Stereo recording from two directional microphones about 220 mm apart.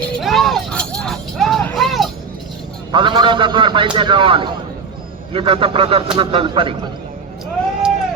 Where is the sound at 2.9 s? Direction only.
20° right (ahead or behind).